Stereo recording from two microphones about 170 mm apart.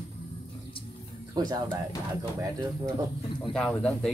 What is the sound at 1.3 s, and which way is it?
Speech, 25° right (ahead or behind).